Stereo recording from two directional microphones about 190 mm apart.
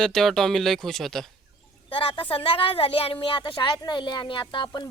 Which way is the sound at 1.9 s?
30° left (ahead or behind).